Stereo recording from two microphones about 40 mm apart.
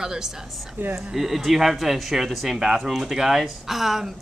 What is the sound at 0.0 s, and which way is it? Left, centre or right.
Speech, centre.